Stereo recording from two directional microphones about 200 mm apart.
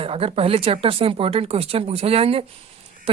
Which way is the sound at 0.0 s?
30° right (ahead or behind).